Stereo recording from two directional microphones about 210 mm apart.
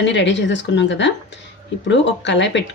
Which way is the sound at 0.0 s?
60° left (ahead or behind).